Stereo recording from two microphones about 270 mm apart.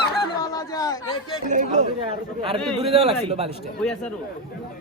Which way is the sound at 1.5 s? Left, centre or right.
Right.